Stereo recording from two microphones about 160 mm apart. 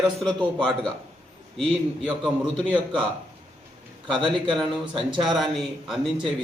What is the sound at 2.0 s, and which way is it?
Speech, 10° right (ahead or behind).